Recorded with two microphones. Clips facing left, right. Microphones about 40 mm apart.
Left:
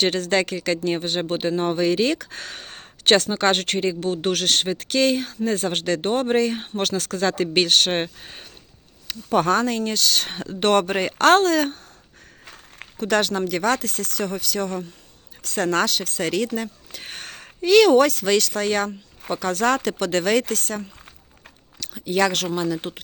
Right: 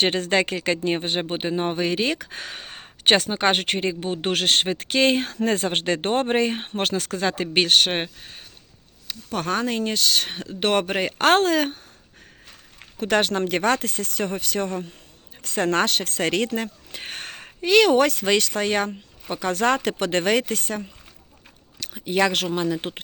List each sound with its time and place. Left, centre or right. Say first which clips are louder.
0.0 s speech: even; right
5.1 s speech: right 1 dB; right
5.6 s speech: even; right
7.0 s speech: left 2 dB; right
9.5 s speech: left 3 dB; centre
13.0 s speech: even; right